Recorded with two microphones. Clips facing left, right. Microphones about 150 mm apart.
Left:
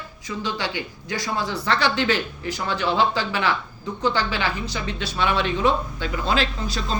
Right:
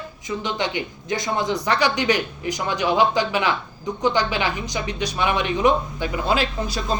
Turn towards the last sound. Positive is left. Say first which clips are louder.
# right 2 dB
turn(degrees=-15)  # may be behind; listen again after turning